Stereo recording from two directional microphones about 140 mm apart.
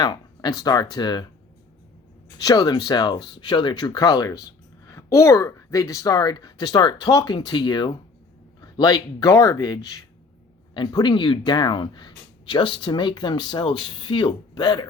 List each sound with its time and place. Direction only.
0.0 s speech: 30° left (ahead or behind)
2.4 s speech: 25° left (ahead or behind)